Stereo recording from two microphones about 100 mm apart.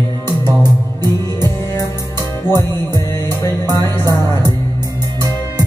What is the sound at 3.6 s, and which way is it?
Music, 40° right (ahead or behind).